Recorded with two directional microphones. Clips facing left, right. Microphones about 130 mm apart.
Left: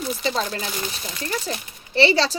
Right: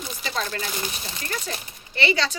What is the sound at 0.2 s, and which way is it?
Speech, 30° left (ahead or behind).